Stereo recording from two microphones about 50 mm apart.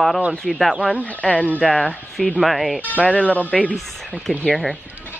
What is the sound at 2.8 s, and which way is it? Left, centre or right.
Speech, left.